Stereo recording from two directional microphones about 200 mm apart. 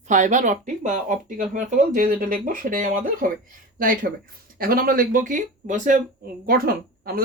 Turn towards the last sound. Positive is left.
turn(degrees=-45)  # may be behind; listen again after turning